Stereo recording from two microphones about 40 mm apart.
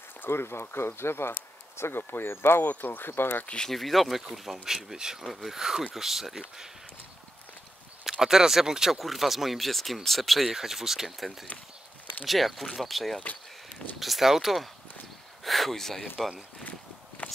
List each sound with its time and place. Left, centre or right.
0.2 s speech: left
2.6 s speech: left
3.6 s speech: centre
5.2 s speech: centre
5.6 s speech: centre
8.0 s speech: centre
8.9 s speech: centre
17.2 s a sound: left